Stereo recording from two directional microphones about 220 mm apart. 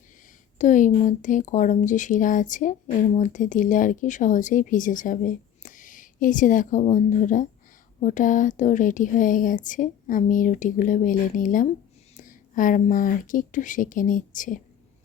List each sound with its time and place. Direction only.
0.6 s speech: 35° left (ahead or behind)